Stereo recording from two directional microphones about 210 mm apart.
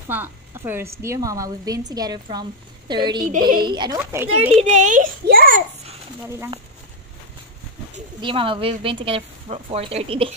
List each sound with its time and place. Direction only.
0.1 s a woman's voice: 10° right (ahead or behind)
3.3 s speech: 40° right (ahead or behind)
3.6 s speech: 20° right (ahead or behind)
4.0 s a woman's voice: 10° right (ahead or behind)
4.6 s a child's voice: 35° right (ahead or behind)
7.9 s speech: 25° right (ahead or behind)